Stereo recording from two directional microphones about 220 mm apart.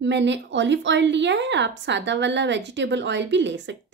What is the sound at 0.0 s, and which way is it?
A woman's voice, 55° right (ahead or behind).